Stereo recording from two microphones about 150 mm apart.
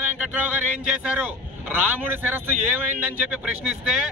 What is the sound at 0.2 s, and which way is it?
A man's voice, 10° right (ahead or behind).